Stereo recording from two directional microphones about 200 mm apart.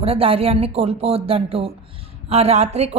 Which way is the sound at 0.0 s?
30° right (ahead or behind).